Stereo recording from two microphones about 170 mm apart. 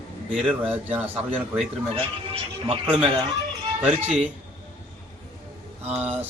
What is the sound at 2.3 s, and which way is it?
Speech, 35° right (ahead or behind).